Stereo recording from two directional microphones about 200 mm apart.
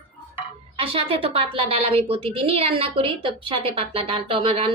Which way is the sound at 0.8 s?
30° right (ahead or behind).